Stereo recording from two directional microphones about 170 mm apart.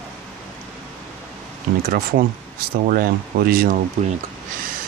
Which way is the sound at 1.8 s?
60° right (ahead or behind).